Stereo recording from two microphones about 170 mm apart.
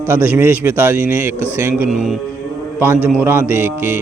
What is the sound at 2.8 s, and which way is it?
Speech, 10° right (ahead or behind).